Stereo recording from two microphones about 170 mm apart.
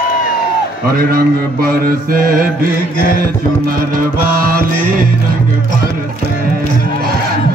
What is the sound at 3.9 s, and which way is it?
Mantra, 60° right (ahead or behind).